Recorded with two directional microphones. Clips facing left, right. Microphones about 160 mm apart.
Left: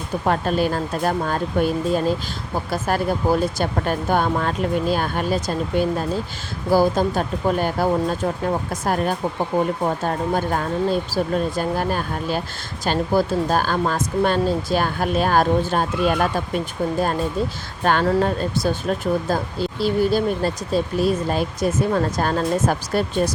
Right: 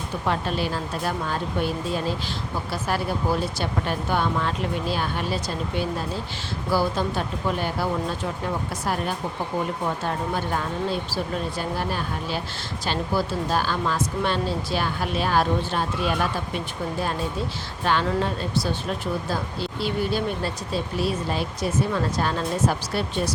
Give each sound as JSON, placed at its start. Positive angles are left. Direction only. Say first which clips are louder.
{"t": 0.3, "sound": "speech", "louder": "left 6 dB", "side_deg": 45}
{"t": 17.8, "sound": "speech", "louder": "left 5 dB", "side_deg": 50}